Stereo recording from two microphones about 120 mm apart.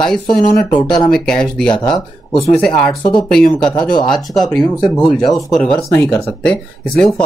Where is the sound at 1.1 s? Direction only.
5° left (ahead or behind).